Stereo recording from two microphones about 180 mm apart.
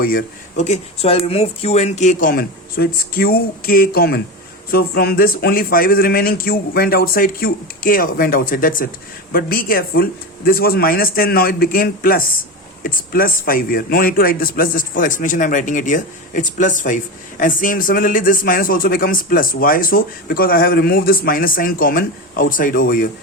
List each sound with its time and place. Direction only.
0.0 s a man's voice: 55° left (ahead or behind)